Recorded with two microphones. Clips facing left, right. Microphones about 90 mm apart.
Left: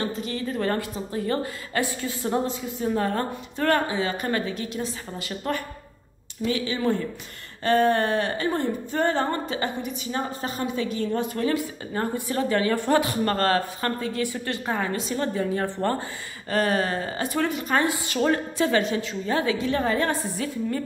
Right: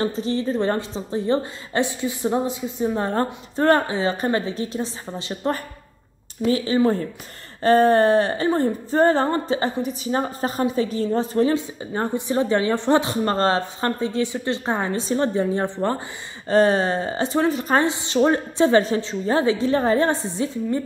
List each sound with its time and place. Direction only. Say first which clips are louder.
0.0 s a woman's voice: right 6 dB; 30° right (ahead or behind)
6.4 s a sound: right 6 dB; 35° right (ahead or behind)
10.6 s a woman's voice: right 5 dB; 35° right (ahead or behind)